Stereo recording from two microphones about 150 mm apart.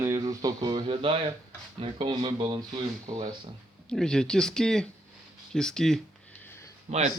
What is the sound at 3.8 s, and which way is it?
Speech, 5° left (ahead or behind).